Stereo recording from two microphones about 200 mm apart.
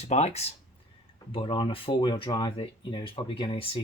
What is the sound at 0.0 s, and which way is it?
Speech, 35° left (ahead or behind).